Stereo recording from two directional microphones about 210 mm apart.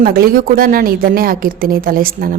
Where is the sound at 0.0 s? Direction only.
45° right (ahead or behind).